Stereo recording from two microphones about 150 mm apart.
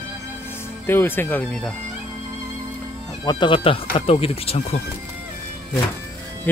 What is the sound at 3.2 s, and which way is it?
Speech, 30° left (ahead or behind).